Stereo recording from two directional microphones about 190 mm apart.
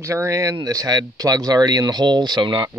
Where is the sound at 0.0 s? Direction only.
15° right (ahead or behind).